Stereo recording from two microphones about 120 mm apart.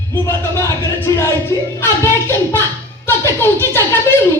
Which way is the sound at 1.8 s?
20° left (ahead or behind).